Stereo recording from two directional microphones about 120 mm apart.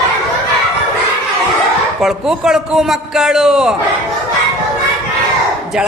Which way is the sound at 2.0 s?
5° right (ahead or behind).